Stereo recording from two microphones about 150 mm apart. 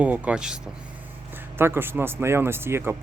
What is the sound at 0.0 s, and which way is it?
Speech, 10° right (ahead or behind).